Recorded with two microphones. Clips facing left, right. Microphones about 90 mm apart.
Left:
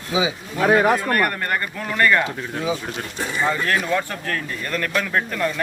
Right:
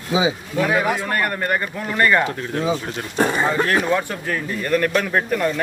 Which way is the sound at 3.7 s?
15° right (ahead or behind).